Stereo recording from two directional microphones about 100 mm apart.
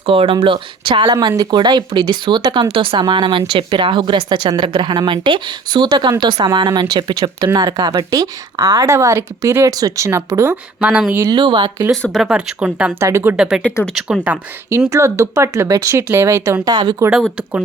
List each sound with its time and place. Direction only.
0.0 s speech: 65° right (ahead or behind)
1.4 s speech: 45° right (ahead or behind)
2.6 s speech: 65° right (ahead or behind); by 10.6 s 25° right (ahead or behind)
10.8 s speech: 10° right (ahead or behind)
11.3 s speech: 50° right (ahead or behind)
12.3 s speech: 10° right (ahead or behind)
13.0 s speech: 30° right (ahead or behind)
13.3 s speech: 5° right (ahead or behind)
14.8 s speech: 30° right (ahead or behind)
16.6 s speech: 45° right (ahead or behind)